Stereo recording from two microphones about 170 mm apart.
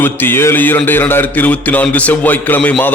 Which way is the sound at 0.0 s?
10° left (ahead or behind).